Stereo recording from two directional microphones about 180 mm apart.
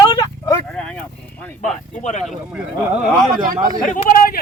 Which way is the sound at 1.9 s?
40° left (ahead or behind).